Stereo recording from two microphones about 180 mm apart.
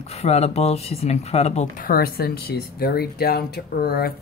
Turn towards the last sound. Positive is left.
turn(degrees=60)  # may be behind; listen again after turning